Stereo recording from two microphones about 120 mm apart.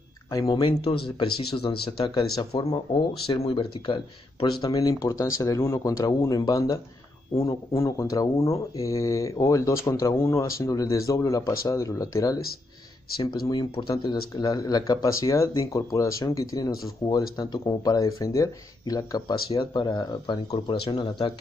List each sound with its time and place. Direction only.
0.3 s speech: 35° left (ahead or behind)
2.9 s speech: 50° left (ahead or behind); by 12.4 s 25° left (ahead or behind)
13.2 s speech: 40° left (ahead or behind)